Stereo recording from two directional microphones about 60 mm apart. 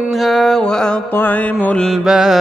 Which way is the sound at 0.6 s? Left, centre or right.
Centre.